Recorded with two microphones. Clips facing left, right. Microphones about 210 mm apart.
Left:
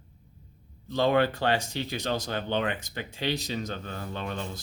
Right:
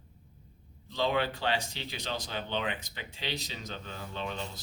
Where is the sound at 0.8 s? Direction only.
50° left (ahead or behind).